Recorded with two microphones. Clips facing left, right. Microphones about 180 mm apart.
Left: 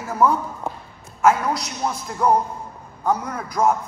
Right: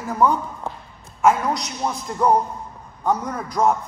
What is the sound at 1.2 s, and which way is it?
A man's voice, centre (ahead or behind).